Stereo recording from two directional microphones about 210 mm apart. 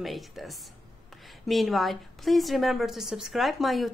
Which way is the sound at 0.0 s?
Centre (ahead or behind).